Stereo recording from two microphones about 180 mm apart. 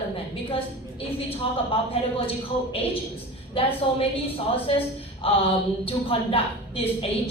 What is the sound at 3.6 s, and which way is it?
A woman's voice, 30° left (ahead or behind).